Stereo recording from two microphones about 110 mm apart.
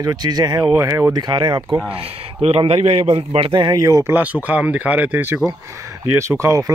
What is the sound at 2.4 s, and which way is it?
A man's voice, 65° right (ahead or behind).